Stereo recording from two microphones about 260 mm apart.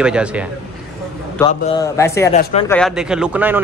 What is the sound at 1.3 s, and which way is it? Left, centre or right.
Speech, centre.